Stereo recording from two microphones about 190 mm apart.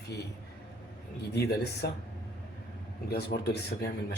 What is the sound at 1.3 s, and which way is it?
Speech, 60° left (ahead or behind).